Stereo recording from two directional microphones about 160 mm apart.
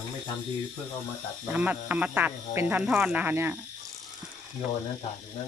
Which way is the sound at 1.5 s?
10° right (ahead or behind).